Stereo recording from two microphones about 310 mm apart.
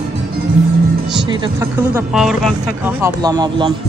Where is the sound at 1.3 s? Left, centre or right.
Centre.